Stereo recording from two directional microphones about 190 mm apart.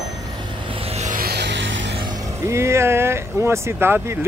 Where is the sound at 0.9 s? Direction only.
40° right (ahead or behind); by 1.9 s 75° right (ahead or behind).